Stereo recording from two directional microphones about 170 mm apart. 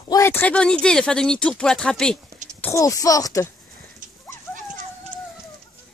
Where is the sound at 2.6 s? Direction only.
15° left (ahead or behind).